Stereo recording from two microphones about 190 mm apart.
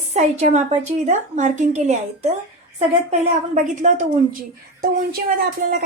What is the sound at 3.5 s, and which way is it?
A woman's voice, 40° right (ahead or behind).